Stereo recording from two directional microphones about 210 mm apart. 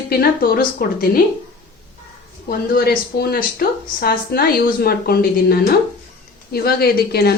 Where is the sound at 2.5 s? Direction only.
45° left (ahead or behind).